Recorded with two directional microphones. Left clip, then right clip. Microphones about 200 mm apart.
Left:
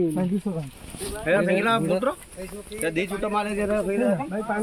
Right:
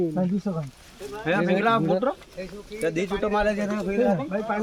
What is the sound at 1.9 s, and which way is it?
Speech, 30° right (ahead or behind).